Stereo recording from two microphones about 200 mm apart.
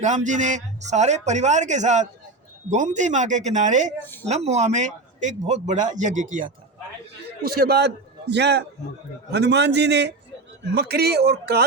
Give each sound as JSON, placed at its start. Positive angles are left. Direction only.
{"t": 0.0, "sound": "a man's voice", "side_deg": -35}
{"t": 4.0, "sound": "speech", "side_deg": 10}
{"t": 4.3, "sound": "a man's voice", "side_deg": -35}
{"t": 7.4, "sound": "a man's voice", "side_deg": -50}